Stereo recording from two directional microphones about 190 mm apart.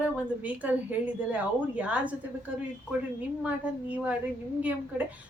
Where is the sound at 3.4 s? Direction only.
5° right (ahead or behind).